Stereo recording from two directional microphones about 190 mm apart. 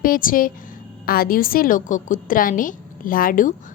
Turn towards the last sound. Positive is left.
turn(degrees=45)  # may be behind; listen again after turning